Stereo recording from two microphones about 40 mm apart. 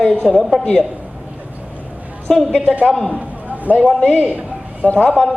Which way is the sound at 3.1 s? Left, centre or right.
Right.